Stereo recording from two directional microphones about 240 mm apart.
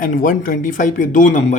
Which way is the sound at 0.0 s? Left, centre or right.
Left.